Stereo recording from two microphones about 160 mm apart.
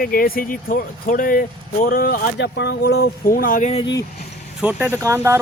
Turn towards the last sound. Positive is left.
turn(degrees=-15)  # may be behind; listen again after turning